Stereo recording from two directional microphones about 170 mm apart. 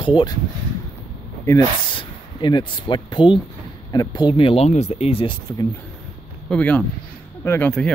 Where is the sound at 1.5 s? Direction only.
20° left (ahead or behind).